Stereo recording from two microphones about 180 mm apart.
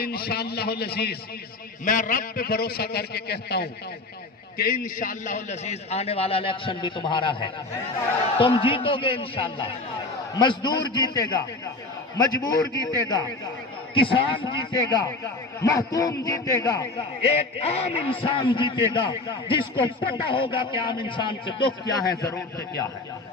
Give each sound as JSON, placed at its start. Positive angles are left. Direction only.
{"t": 0.0, "sound": "a man's voice", "side_deg": 60}
{"t": 1.8, "sound": "a man's voice", "side_deg": 50}
{"t": 17.3, "sound": "a man's voice", "side_deg": 35}